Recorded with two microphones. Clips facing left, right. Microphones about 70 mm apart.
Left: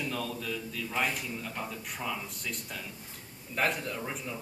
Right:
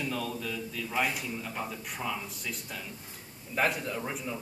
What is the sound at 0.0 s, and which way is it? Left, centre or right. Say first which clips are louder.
A man's voice: right 1 dB; centre.